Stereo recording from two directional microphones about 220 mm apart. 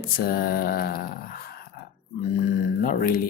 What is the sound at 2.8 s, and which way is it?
Speech, 40° left (ahead or behind).